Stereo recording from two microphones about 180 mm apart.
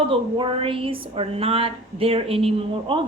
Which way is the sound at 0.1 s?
30° right (ahead or behind).